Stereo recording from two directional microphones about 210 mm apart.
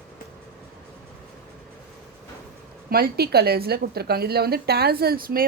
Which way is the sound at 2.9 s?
45° right (ahead or behind).